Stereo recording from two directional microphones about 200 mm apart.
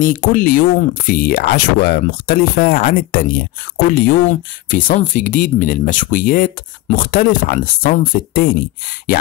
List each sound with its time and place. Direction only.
0.0 s speech: 45° left (ahead or behind)